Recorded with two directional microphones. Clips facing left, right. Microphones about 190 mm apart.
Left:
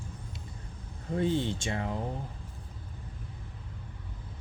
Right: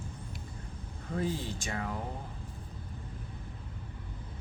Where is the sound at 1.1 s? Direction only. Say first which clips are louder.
Left 5 dB; 25° left (ahead or behind).